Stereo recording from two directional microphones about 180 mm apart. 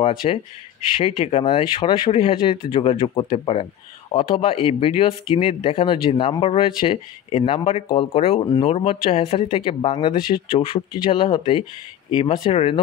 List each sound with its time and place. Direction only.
0.2 s speech: 35° left (ahead or behind)